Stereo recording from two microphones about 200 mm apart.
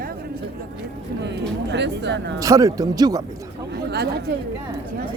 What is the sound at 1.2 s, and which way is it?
Speech, 60° right (ahead or behind).